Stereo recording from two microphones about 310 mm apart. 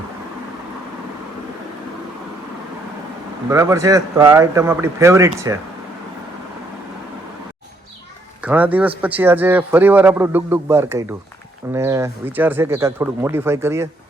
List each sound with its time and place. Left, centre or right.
3.5 s speech: centre
8.4 s a man's voice: centre